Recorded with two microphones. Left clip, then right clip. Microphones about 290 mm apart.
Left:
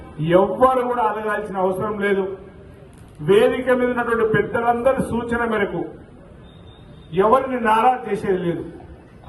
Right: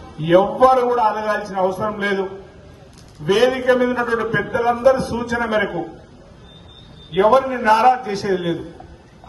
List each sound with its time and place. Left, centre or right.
0.2 s a man's voice: right
3.2 s a man's voice: right
7.1 s a man's voice: right